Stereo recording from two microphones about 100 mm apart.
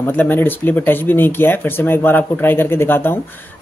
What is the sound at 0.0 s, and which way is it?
A man's voice, 20° left (ahead or behind).